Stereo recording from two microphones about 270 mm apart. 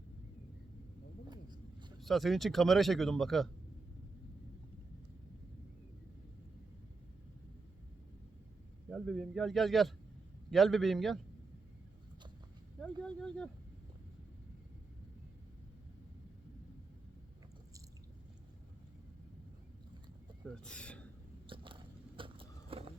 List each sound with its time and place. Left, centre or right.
1.3 s a sound: centre
2.0 s speech: centre
8.9 s speech: centre
12.8 s speech: centre
20.7 s speech: centre
21.4 s biting: centre